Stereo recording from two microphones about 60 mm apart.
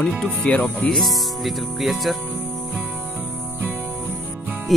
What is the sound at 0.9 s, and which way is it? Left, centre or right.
Speech, centre.